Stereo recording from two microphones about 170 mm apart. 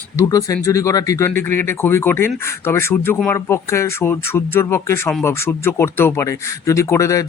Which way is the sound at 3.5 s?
15° left (ahead or behind).